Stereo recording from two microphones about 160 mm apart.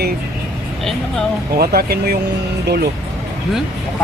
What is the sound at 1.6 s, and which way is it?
Speech, 75° right (ahead or behind).